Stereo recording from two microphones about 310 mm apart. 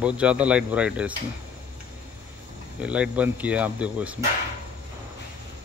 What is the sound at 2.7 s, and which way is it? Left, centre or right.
Speech, centre.